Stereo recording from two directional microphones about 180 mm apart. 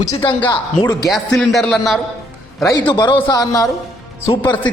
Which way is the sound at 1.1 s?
Centre (ahead or behind).